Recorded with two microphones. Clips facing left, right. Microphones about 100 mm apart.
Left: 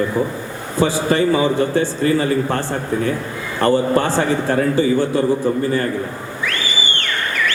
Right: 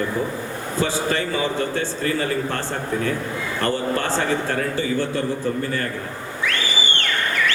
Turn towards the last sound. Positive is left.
turn(degrees=20)  # may be behind; listen again after turning